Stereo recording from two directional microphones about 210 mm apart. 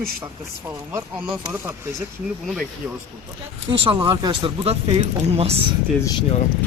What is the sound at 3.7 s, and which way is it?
Speech, 20° right (ahead or behind).